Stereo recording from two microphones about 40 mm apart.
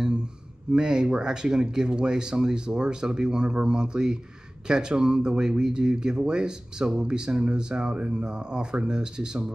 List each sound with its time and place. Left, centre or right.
0.7 s speech: centre